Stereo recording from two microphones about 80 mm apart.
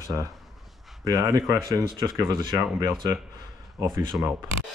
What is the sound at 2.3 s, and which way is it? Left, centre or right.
Speech, right.